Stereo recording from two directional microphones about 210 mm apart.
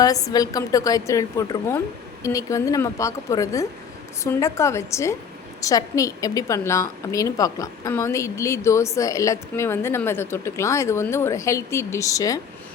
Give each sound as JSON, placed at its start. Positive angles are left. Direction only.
{"t": 0.0, "sound": "a woman's voice", "side_deg": 15}